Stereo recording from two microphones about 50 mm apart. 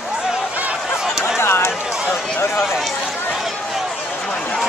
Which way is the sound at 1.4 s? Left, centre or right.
Left.